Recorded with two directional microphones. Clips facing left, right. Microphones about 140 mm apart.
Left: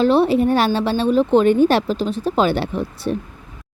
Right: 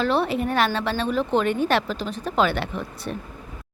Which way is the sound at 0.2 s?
35° left (ahead or behind).